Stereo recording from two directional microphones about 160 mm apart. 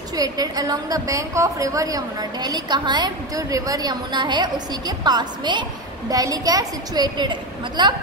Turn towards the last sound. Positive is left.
turn(degrees=-30)  # may be behind; listen again after turning